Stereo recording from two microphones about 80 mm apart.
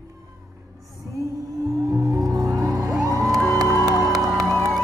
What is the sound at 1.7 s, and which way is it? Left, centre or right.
Music, right.